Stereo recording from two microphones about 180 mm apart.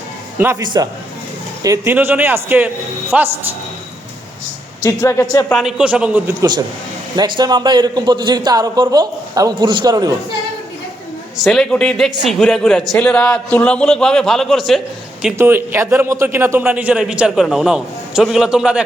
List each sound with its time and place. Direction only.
0.3 s a man's voice: 15° right (ahead or behind)
1.6 s speech: 15° right (ahead or behind)
4.8 s a woman's voice: 15° left (ahead or behind)
5.5 s a man's voice: centre (ahead or behind)
6.4 s a man's voice: 25° right (ahead or behind)
11.3 s a man's voice: centre (ahead or behind)
15.2 s a man's voice: 10° right (ahead or behind)